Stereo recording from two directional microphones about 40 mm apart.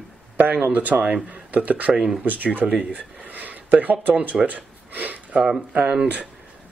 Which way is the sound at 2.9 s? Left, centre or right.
Right.